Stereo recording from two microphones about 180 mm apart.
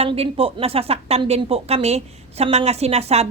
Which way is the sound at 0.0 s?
35° right (ahead or behind).